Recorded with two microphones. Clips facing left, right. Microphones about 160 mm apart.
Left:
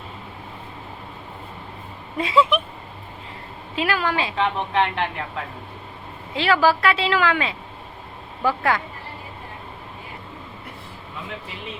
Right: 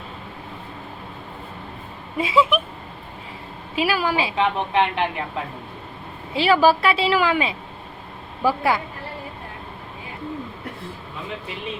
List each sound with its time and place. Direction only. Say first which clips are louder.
2.1 s speech: even; 5° right (ahead or behind)
3.8 s a woman's voice: right 2 dB; 10° right (ahead or behind)
6.3 s a woman's voice: right 2 dB; 15° right (ahead or behind)